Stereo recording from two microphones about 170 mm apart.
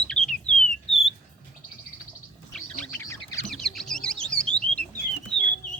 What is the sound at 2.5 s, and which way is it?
Bird, 10° left (ahead or behind).